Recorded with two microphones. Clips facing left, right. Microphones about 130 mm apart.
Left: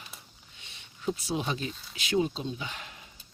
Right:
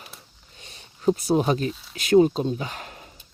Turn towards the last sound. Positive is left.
turn(degrees=-45)  # may be behind; listen again after turning